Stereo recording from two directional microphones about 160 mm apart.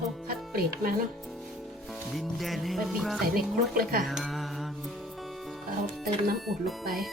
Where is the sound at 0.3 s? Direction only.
65° right (ahead or behind).